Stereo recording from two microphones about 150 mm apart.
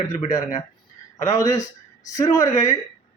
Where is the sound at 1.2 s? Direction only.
20° left (ahead or behind).